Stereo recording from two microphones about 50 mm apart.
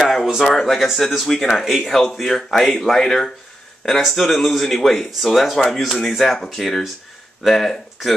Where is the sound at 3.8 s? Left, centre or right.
Centre.